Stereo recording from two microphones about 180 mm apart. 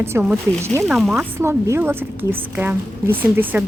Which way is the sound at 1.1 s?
15° right (ahead or behind).